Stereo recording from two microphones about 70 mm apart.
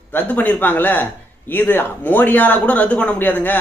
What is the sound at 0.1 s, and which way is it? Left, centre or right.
Speech, left.